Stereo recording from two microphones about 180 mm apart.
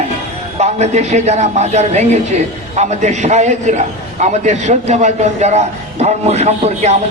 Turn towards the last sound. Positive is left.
turn(degrees=-35)  # may be behind; listen again after turning